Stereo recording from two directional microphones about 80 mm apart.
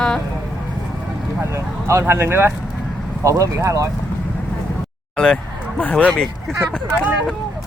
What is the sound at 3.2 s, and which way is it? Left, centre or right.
Speech, right.